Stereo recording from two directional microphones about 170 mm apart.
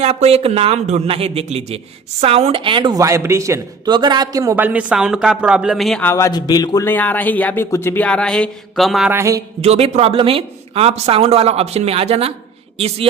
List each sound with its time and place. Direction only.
0.0 s speech: 40° right (ahead or behind); by 6.1 s centre (ahead or behind)
6.1 s speech: 20° left (ahead or behind)
6.8 s speech: 10° left (ahead or behind)
9.1 s speech: 20° right (ahead or behind)
9.6 s speech: 35° right (ahead or behind)